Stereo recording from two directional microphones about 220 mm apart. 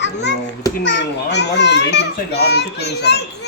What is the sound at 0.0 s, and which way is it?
A child's voice, 55° left (ahead or behind).